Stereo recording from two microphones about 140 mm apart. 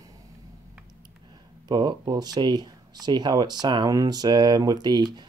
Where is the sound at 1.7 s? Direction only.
30° right (ahead or behind).